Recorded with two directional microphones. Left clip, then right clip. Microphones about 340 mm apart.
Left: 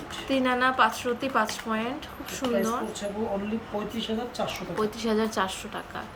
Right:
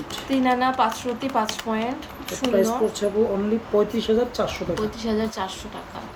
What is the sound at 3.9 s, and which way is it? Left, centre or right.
Speech, centre.